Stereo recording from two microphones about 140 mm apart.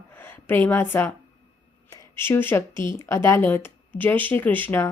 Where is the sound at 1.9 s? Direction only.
20° left (ahead or behind).